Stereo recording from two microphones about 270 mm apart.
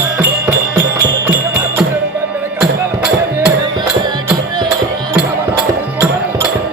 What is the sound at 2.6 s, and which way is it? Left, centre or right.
Music, centre.